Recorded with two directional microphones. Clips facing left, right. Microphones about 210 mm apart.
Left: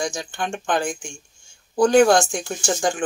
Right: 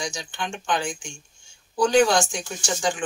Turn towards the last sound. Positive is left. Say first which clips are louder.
# left 4 dB
turn(degrees=50)  # may be behind; listen again after turning